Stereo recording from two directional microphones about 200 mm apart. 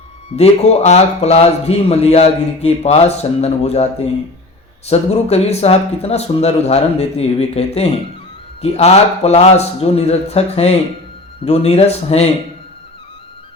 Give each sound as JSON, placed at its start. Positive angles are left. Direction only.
{"t": 0.3, "sound": "speech", "side_deg": 30}